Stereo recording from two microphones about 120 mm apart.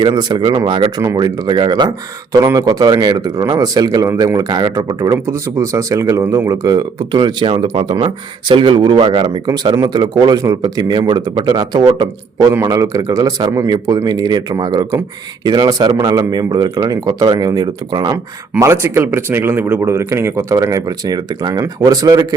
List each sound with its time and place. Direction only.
0.0 s speech: 35° right (ahead or behind)
18.6 s speech: 25° right (ahead or behind)